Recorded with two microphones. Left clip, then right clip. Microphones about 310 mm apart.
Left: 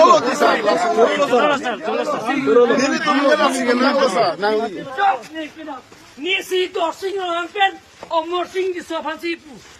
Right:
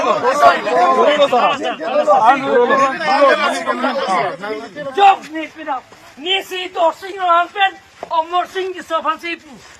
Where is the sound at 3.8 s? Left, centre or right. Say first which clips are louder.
Left 1 dB; right.